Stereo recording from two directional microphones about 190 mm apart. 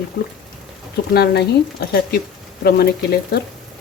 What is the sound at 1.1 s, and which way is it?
Speech, 60° left (ahead or behind).